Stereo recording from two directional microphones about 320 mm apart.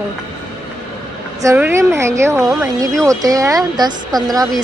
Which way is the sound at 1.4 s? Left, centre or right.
Centre.